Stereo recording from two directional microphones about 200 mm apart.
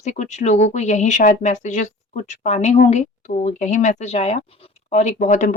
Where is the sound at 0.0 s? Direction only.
35° left (ahead or behind).